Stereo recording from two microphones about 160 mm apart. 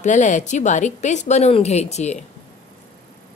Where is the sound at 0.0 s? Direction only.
50° left (ahead or behind).